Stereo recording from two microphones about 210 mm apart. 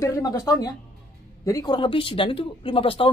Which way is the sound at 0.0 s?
15° left (ahead or behind).